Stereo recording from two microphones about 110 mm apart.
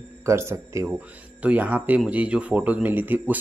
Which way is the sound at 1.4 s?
15° right (ahead or behind).